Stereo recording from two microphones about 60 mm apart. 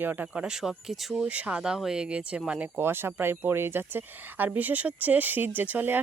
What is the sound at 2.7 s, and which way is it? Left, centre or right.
Speech, right.